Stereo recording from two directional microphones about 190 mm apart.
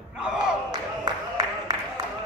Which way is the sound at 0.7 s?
20° right (ahead or behind).